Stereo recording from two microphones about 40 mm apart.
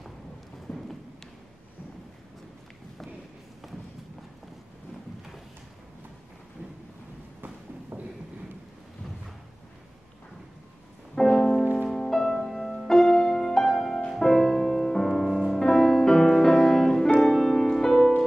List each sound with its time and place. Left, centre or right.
7.9 s a sound: right
11.1 s music: centre
11.9 s music: centre